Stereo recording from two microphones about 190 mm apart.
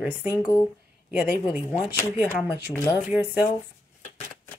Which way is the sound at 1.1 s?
10° right (ahead or behind).